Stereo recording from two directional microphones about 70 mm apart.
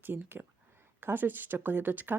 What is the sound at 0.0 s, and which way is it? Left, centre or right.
Speech, right.